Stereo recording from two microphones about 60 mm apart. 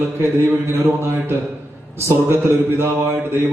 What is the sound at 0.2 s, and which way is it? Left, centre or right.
Speech, right.